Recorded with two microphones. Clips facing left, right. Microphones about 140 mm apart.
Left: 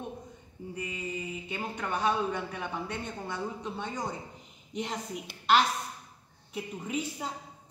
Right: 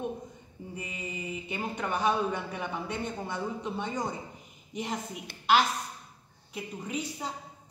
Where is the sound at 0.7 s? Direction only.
20° right (ahead or behind).